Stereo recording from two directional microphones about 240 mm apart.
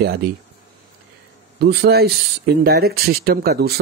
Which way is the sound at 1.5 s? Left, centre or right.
Right.